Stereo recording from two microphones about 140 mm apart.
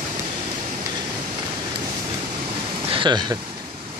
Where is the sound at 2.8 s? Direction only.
35° right (ahead or behind).